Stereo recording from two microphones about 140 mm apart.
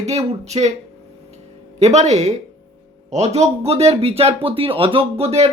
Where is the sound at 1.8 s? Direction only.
50° right (ahead or behind).